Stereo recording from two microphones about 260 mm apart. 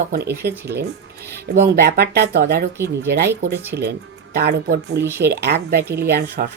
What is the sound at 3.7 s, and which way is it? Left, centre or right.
Speech, right.